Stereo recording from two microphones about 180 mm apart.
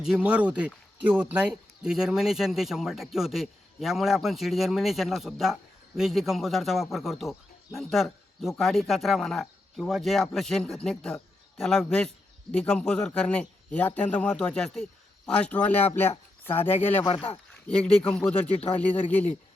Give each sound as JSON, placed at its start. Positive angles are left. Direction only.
{"t": 0.0, "sound": "a man's voice", "side_deg": -5}
{"t": 17.7, "sound": "speech", "side_deg": 5}